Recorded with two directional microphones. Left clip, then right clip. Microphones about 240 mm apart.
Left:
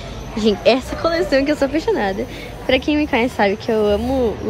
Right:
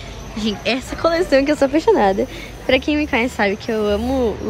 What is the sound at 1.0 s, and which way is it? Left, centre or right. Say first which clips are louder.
Speech: right 1 dB; centre.